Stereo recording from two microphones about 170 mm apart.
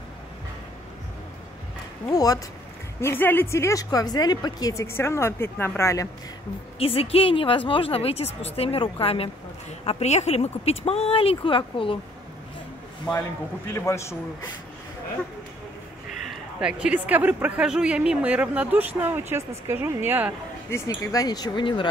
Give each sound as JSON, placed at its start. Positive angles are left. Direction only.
{"t": 2.0, "sound": "speech", "side_deg": 20}
{"t": 6.8, "sound": "a woman's voice", "side_deg": 35}
{"t": 13.7, "sound": "speech", "side_deg": 15}
{"t": 16.3, "sound": "a man's voice", "side_deg": -5}
{"t": 20.7, "sound": "speech", "side_deg": 15}